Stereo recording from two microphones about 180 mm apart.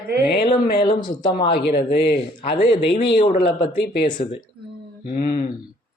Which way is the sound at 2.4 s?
35° left (ahead or behind).